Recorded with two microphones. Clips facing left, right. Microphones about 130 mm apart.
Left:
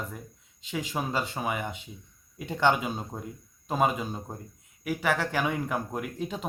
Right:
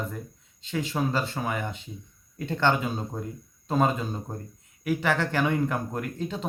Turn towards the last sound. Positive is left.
turn(degrees=10)  # may be behind; listen again after turning